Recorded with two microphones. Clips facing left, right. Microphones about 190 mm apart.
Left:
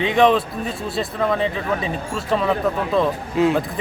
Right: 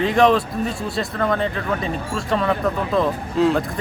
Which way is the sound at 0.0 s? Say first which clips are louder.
Even; centre (ahead or behind).